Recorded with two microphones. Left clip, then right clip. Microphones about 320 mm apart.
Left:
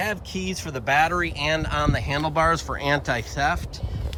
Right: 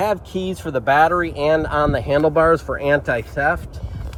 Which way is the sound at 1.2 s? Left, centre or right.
Centre.